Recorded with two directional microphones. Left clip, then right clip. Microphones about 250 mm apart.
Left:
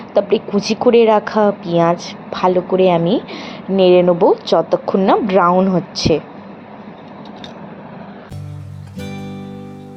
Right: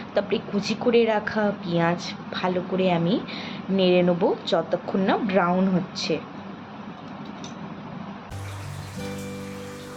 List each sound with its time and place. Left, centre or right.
0.1 s a woman's voice: centre